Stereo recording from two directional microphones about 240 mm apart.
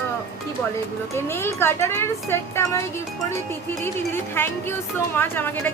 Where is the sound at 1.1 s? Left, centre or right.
Centre.